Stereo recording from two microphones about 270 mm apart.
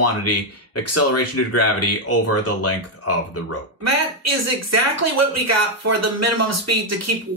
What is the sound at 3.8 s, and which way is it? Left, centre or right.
Speech, right.